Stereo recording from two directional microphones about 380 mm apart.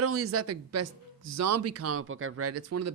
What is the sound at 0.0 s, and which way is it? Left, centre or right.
Speech, right.